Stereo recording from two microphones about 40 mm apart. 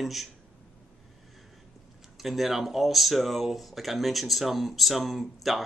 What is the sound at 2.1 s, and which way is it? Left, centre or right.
Speech, centre.